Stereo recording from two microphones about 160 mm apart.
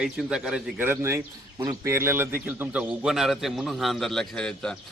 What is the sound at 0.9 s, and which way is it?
A man's voice, 15° right (ahead or behind).